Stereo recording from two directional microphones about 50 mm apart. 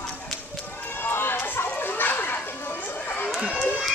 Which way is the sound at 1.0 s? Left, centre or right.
Left.